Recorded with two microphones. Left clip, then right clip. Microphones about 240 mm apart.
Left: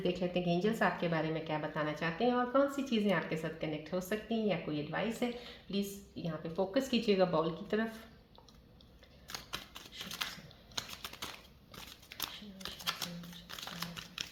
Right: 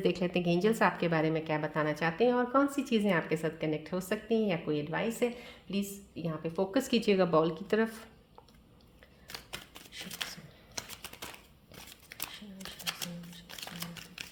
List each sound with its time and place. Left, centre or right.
0.0 s speech: right
10.9 s typewriter: centre
12.6 s a sound: centre